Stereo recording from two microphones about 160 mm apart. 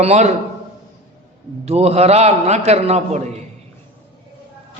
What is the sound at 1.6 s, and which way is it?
A man's voice, 40° right (ahead or behind).